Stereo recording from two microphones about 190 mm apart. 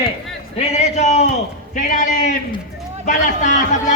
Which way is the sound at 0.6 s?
35° left (ahead or behind).